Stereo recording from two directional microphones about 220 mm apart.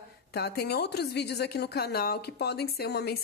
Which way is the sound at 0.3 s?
45° left (ahead or behind).